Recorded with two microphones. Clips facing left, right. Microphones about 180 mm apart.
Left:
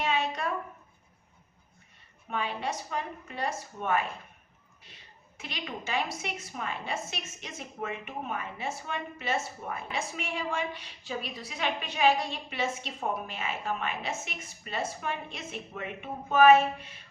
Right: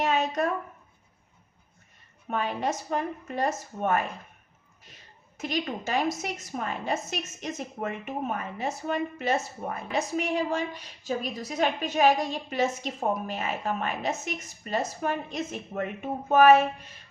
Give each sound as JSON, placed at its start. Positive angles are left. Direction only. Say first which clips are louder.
{"t": 0.0, "sound": "a woman's voice", "louder": "right 4 dB", "side_deg": -45}
{"t": 2.3, "sound": "a woman's voice", "louder": "right 4 dB", "side_deg": -45}
{"t": 5.4, "sound": "a woman's voice", "louder": "right 8 dB", "side_deg": -45}